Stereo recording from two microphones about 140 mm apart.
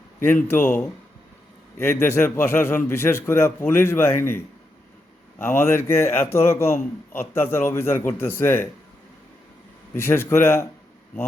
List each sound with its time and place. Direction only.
0.2 s a man's voice: 15° left (ahead or behind)
5.4 s a man's voice: 15° left (ahead or behind)
9.9 s a man's voice: 15° left (ahead or behind)